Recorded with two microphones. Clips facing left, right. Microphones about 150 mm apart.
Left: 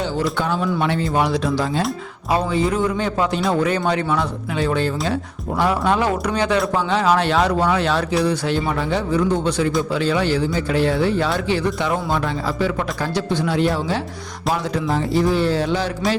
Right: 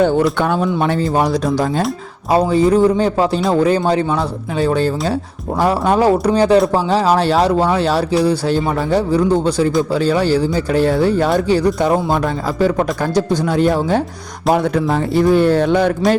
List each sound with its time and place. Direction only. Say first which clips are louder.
0.0 s speech: right 8 dB; 60° right (ahead or behind)
0.6 s speech: right 4 dB; 40° right (ahead or behind)
14.5 s speech: right 6 dB; 60° right (ahead or behind)